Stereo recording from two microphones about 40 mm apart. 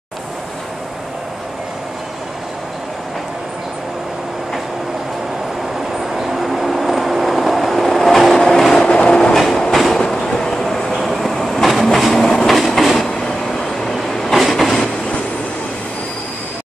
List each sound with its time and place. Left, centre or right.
6.1 s train: centre
8.4 s vehicle: centre
8.7 s vehicle: left
9.8 s train: centre